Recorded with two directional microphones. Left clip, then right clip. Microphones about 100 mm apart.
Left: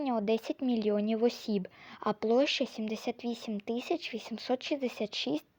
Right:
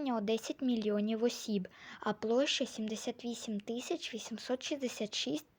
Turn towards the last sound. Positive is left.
turn(degrees=30)  # may be behind; listen again after turning